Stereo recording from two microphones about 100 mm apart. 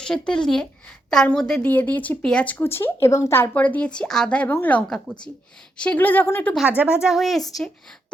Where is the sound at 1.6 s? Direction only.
15° left (ahead or behind).